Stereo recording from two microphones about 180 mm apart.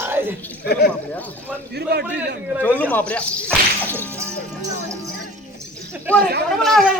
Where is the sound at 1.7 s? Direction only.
65° right (ahead or behind).